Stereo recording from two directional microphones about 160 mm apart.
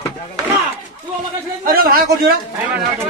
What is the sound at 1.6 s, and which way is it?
Speech, 65° right (ahead or behind).